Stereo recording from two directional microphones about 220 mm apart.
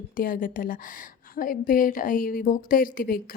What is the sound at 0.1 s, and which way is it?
A woman's voice, 40° left (ahead or behind).